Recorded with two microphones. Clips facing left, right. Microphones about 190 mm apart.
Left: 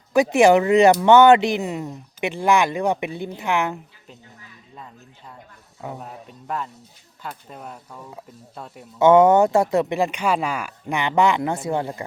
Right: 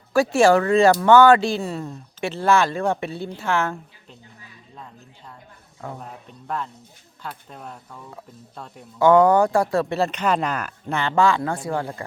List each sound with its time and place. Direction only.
0.1 s speech: 20° left (ahead or behind)
5.8 s speech: 5° left (ahead or behind)
7.9 s speech: 20° left (ahead or behind)
8.5 s speech: 5° left (ahead or behind)
9.0 s speech: 20° left (ahead or behind)